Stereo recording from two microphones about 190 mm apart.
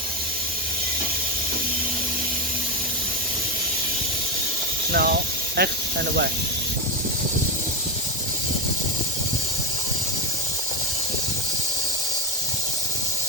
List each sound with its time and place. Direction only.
4.9 s snake: 50° right (ahead or behind)